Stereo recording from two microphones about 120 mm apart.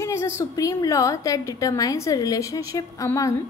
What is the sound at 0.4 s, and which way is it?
A woman's voice, 25° left (ahead or behind).